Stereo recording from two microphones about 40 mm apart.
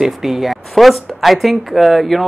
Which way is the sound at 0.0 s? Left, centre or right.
Centre.